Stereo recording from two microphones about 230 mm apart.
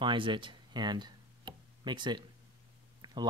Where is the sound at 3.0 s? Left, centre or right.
Centre.